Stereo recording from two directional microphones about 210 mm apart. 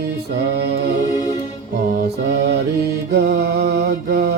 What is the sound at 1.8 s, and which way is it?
Music, 50° right (ahead or behind).